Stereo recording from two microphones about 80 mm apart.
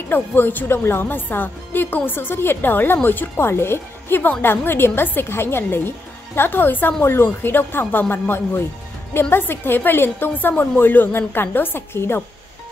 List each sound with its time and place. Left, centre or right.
0.1 s speech: left